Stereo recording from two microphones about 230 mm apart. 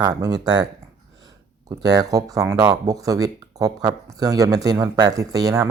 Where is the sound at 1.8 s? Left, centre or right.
Centre.